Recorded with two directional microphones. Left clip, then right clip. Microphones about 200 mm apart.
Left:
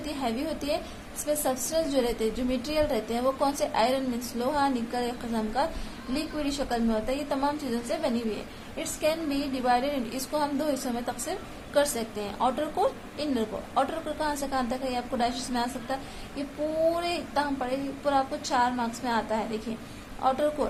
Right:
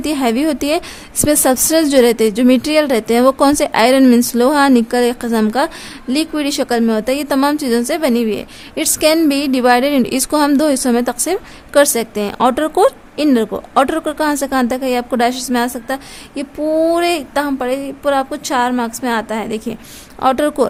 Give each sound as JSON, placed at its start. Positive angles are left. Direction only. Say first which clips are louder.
{"t": 0.0, "sound": "a woman's voice", "louder": "right 15 dB", "side_deg": -65}